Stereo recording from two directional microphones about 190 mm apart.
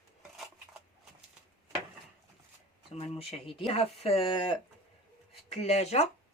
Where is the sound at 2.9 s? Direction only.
30° left (ahead or behind).